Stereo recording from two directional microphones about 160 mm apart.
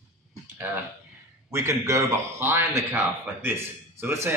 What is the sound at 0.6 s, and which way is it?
A man's voice, 15° right (ahead or behind).